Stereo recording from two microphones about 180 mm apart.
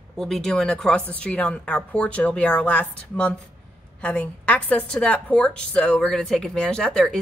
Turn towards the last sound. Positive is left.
turn(degrees=5)  # may be behind; listen again after turning